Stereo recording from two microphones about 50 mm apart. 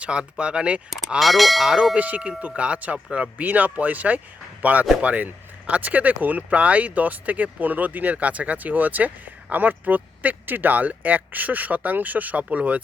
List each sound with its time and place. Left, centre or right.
0.0 s speech: right
0.9 s speech: centre
2.0 s speech: right